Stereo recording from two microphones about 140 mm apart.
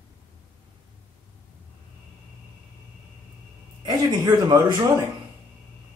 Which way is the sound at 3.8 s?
30° right (ahead or behind).